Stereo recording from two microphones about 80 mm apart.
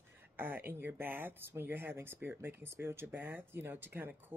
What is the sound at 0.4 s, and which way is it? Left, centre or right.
Speech, right.